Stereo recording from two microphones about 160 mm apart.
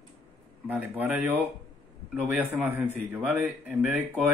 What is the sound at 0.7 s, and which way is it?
A man's voice, 10° right (ahead or behind).